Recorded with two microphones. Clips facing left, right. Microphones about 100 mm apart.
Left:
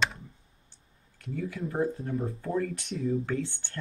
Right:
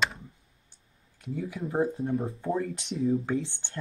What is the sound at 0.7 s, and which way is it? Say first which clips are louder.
Speech: left 1 dB; 20° right (ahead or behind).